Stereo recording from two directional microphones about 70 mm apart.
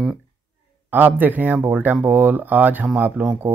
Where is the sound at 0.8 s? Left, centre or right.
Right.